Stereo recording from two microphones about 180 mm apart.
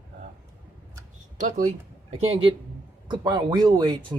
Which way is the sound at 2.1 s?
35° right (ahead or behind).